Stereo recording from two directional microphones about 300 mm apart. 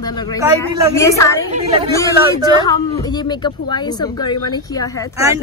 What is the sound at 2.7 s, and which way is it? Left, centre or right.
Speech, centre.